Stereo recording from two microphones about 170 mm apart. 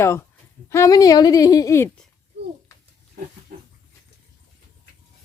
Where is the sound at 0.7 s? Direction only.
20° left (ahead or behind).